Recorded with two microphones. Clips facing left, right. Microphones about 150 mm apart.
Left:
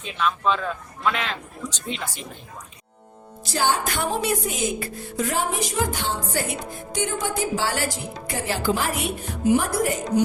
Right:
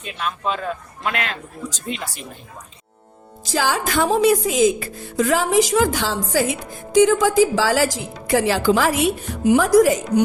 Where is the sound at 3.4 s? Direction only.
90° right.